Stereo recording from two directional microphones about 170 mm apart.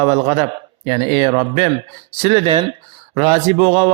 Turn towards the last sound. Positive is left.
turn(degrees=-30)  # may be behind; listen again after turning